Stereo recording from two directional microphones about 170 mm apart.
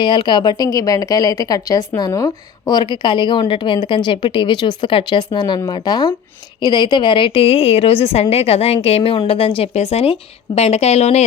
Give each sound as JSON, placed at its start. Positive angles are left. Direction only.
{"t": 0.0, "sound": "a woman's voice", "side_deg": 25}